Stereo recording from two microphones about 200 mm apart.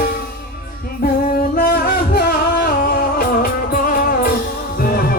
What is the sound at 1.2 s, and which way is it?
Singing, 45° left (ahead or behind).